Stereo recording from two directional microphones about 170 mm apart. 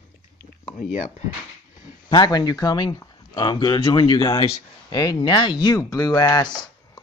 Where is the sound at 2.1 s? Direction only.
25° left (ahead or behind).